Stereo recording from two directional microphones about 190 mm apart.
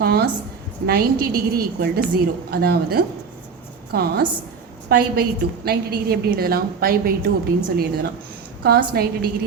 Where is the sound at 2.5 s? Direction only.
55° right (ahead or behind).